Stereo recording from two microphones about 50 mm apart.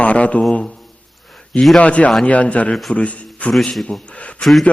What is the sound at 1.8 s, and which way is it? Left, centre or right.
Speech, left.